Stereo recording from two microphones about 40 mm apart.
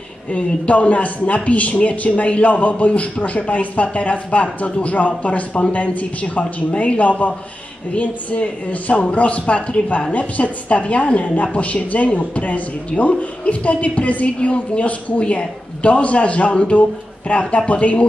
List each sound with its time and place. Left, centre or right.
0.3 s a man's voice: left
12.9 s speech: centre
13.5 s a man's voice: left